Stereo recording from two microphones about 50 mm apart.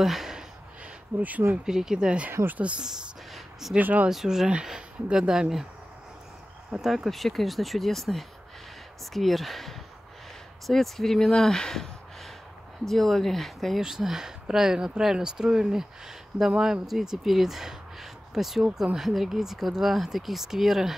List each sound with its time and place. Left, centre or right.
0.0 s a sound: centre
1.7 s speech: centre
3.7 s speech: right
4.1 s speech: centre
6.7 s speech: centre
13.7 s speech: centre